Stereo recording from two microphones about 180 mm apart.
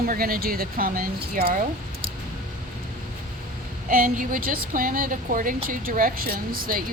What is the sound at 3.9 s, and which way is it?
A woman's voice, 50° right (ahead or behind).